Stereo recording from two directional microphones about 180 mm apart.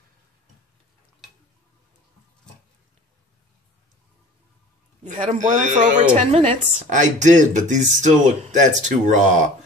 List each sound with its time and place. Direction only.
5.0 s a woman's voice: 40° right (ahead or behind)
6.9 s speech: 45° right (ahead or behind)